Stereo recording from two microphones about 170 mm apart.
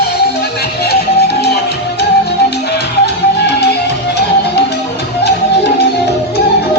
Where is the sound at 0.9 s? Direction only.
75° left (ahead or behind).